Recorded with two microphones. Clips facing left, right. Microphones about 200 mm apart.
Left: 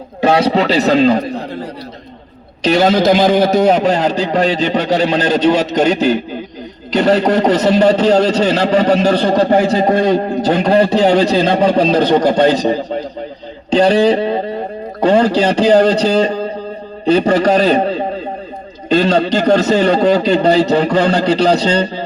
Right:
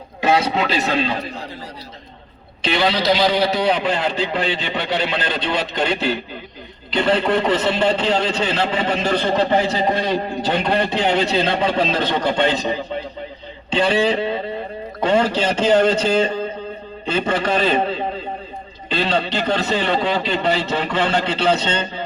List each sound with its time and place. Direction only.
0.2 s a man's voice: 35° left (ahead or behind)
2.6 s a man's voice: 40° left (ahead or behind)